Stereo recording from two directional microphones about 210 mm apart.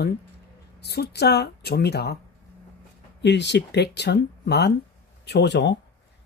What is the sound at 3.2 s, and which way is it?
Speech, 55° left (ahead or behind).